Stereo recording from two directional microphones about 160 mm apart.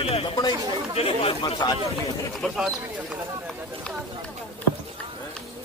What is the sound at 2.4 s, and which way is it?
Speech, centre (ahead or behind).